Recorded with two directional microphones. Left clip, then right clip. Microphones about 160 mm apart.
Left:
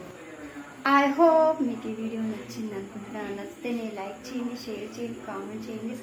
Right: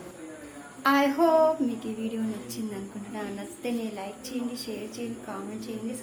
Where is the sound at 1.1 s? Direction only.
10° left (ahead or behind).